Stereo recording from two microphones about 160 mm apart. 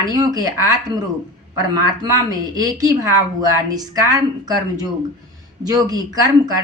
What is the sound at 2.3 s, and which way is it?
A woman's voice, 25° right (ahead or behind).